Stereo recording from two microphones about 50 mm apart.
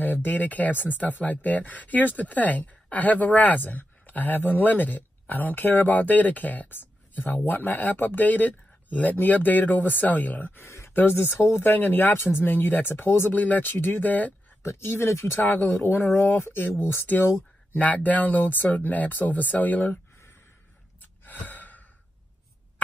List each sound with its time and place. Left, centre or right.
0.0 s speech: left
10.6 s a sound: left
11.0 s speech: left
11.3 s speech: left
11.6 s speech: left
13.3 s speech: left
14.6 s speech: left
15.4 s speech: left
17.7 s speech: left
21.0 s gasp: left